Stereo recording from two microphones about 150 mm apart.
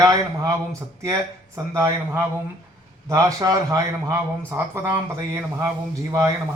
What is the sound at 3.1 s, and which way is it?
A man's voice, 25° right (ahead or behind).